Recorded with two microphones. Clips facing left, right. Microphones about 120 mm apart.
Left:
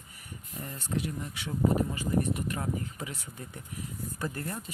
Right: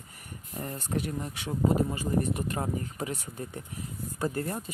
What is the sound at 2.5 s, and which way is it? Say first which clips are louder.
Speech: right 2 dB; 35° right (ahead or behind).